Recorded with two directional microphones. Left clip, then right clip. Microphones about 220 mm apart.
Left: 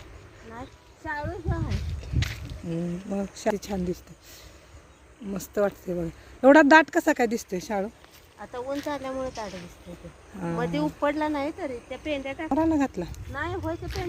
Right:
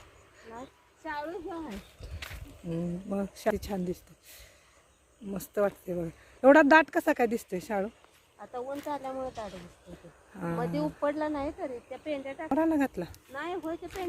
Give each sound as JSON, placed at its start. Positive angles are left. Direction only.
{"t": 1.0, "sound": "a woman's voice", "side_deg": -40}
{"t": 2.0, "sound": "speech", "side_deg": -5}
{"t": 8.9, "sound": "speech", "side_deg": 35}
{"t": 10.6, "sound": "speech", "side_deg": 30}
{"t": 12.5, "sound": "speech", "side_deg": -5}
{"t": 13.3, "sound": "speech", "side_deg": -25}
{"t": 14.0, "sound": "speech", "side_deg": -15}